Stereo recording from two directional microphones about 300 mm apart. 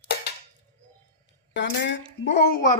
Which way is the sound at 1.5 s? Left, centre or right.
Left.